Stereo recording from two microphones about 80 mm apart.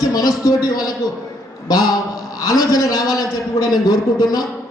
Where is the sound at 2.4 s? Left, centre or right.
Left.